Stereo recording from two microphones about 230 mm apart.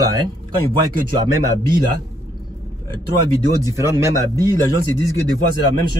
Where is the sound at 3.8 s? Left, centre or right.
Centre.